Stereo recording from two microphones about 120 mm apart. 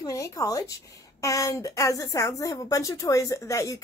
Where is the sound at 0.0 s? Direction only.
30° left (ahead or behind).